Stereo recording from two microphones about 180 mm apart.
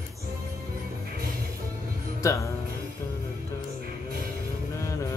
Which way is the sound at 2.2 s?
15° left (ahead or behind).